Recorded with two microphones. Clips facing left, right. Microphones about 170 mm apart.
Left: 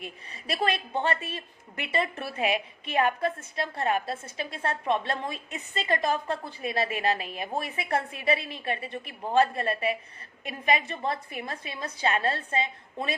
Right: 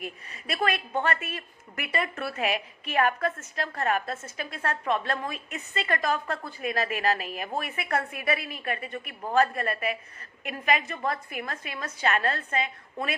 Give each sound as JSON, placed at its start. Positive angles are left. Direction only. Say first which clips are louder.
{"t": 0.0, "sound": "a woman's voice", "louder": "right 2 dB", "side_deg": 30}